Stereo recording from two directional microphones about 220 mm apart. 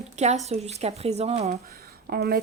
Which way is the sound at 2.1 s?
45° right (ahead or behind).